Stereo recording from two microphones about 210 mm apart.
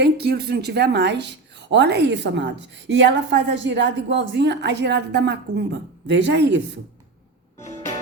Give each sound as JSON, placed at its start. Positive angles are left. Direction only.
{"t": 0.0, "sound": "a woman's voice", "side_deg": -50}